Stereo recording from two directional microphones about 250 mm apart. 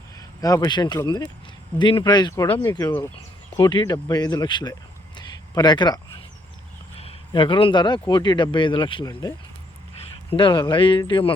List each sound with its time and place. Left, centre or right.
0.2 s speech: centre
7.0 s speech: left
10.3 s speech: centre